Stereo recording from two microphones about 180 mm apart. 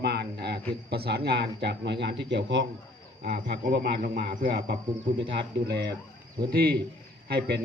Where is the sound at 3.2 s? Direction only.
65° right (ahead or behind).